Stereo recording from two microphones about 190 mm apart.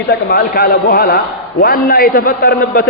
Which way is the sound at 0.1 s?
55° left (ahead or behind).